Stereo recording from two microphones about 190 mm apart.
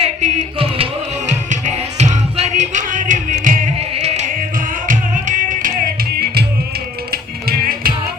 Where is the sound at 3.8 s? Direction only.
35° right (ahead or behind).